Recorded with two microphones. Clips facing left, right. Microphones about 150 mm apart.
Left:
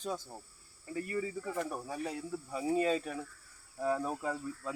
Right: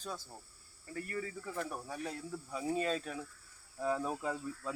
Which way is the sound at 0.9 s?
10° left (ahead or behind).